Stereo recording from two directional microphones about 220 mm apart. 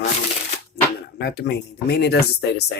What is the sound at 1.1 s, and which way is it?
Music, 45° left (ahead or behind).